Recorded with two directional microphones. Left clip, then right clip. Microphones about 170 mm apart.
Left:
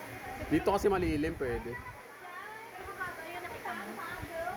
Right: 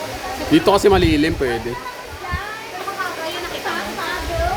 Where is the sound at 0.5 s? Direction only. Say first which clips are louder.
Right 15 dB; 10° right (ahead or behind).